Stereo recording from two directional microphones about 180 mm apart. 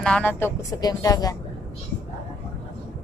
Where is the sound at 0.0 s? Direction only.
5° left (ahead or behind).